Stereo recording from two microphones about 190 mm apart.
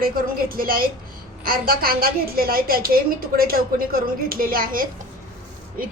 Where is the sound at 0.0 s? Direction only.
50° right (ahead or behind).